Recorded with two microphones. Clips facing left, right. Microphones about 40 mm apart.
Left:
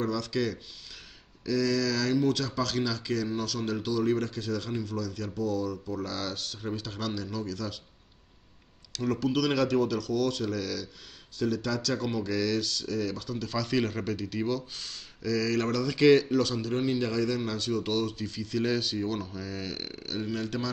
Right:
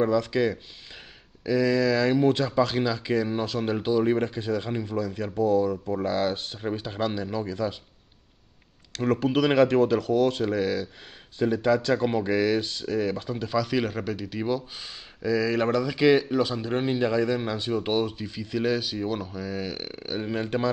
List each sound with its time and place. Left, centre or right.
0.0 s speech: right
8.9 s speech: right
13.6 s speech: centre; by 20.7 s right